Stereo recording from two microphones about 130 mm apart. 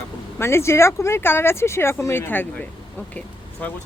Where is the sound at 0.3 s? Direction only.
20° left (ahead or behind).